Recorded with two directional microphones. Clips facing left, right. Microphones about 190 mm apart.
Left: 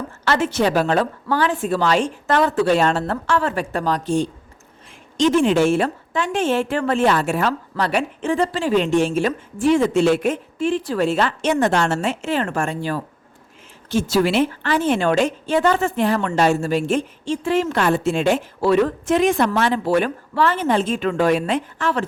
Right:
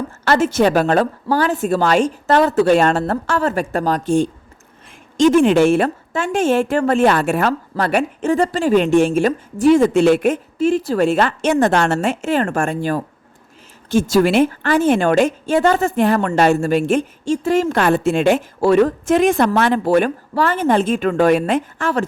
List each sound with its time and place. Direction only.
0.3 s a woman's voice: 40° right (ahead or behind)